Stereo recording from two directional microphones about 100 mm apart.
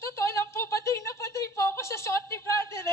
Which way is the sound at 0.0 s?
30° left (ahead or behind).